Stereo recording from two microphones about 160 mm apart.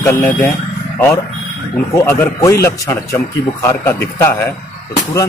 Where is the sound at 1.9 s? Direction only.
15° left (ahead or behind).